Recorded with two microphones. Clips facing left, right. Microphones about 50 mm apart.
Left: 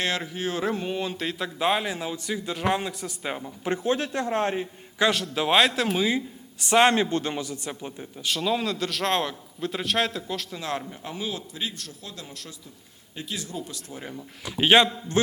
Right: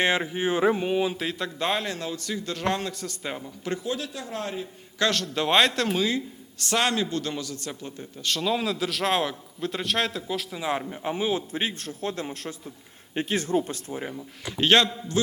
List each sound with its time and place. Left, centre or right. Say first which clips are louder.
0.0 s speech: right 4 dB; right; by 3.8 s centre
3.8 s a man's voice: left 6 dB; left
4.9 s speech: left 2 dB; centre
10.6 s a man's voice: right 3 dB; centre; by 13.9 s right
14.1 s speech: right 1 dB; centre
14.6 s speech: left 2 dB; centre